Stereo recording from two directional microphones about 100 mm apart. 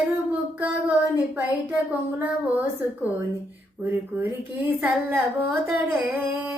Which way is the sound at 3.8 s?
15° right (ahead or behind).